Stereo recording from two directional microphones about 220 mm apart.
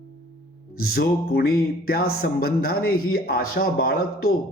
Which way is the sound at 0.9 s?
45° left (ahead or behind).